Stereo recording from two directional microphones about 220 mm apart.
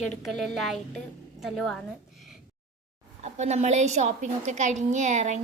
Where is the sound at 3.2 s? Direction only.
30° right (ahead or behind).